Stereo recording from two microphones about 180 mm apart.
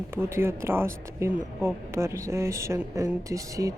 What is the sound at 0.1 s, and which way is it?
Speech, 15° right (ahead or behind).